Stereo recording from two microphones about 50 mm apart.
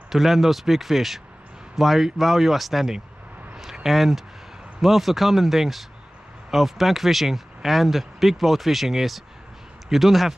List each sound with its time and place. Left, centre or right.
0.1 s speech: centre